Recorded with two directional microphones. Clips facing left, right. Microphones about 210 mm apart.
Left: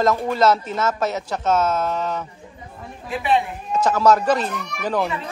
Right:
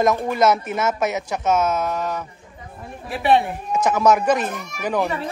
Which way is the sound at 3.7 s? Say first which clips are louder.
Even; 15° right (ahead or behind).